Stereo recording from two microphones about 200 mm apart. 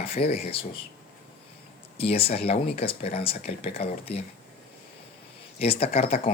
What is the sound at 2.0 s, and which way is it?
Speech, 30° left (ahead or behind).